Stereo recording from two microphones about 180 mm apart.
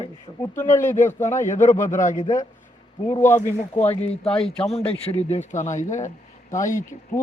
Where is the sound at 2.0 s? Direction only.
45° left (ahead or behind).